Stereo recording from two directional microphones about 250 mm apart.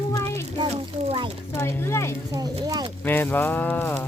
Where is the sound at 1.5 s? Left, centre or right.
Centre.